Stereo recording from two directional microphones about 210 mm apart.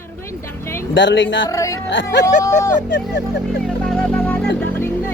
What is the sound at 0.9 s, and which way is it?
Speech, 60° left (ahead or behind).